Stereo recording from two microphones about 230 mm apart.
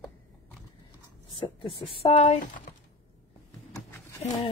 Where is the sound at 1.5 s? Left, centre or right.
Left.